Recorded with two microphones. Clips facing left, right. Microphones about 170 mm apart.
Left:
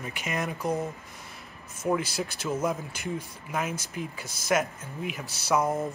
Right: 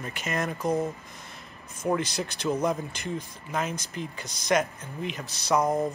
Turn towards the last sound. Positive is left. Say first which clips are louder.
# right 3 dB
turn(degrees=-15)  # may be behind; listen again after turning